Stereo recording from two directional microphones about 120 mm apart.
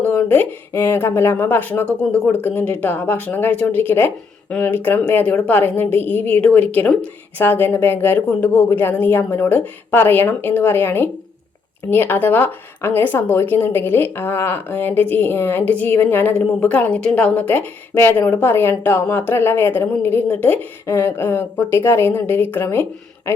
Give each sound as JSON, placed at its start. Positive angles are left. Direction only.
{"t": 0.0, "sound": "speech", "side_deg": 20}